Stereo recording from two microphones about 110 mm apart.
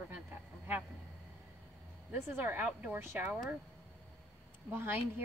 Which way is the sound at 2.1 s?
20° right (ahead or behind).